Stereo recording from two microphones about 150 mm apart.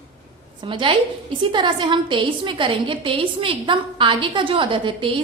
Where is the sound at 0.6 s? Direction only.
35° right (ahead or behind).